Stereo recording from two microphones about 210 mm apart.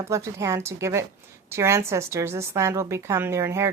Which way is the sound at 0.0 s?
15° right (ahead or behind).